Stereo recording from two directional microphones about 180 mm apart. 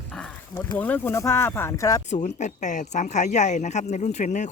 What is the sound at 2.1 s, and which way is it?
Speech, 40° left (ahead or behind).